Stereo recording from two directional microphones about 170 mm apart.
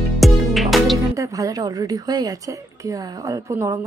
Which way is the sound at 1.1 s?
20° right (ahead or behind).